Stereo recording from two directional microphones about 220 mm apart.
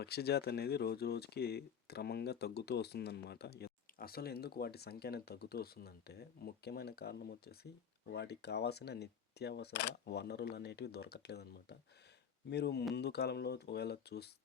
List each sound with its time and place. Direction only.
0.0 s speech: 45° left (ahead or behind)
12.5 s speech: 50° left (ahead or behind)